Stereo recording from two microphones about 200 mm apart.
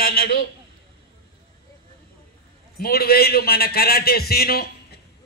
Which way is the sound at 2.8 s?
50° left (ahead or behind).